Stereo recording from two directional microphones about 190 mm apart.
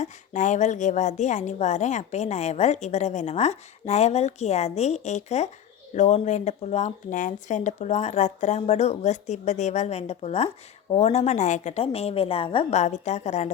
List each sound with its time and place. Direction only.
0.0 s a woman's voice: 40° left (ahead or behind)